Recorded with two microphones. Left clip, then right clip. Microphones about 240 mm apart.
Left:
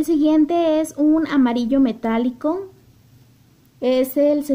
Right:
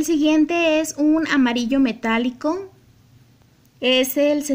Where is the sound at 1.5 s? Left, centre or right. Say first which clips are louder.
Left 1 dB; centre.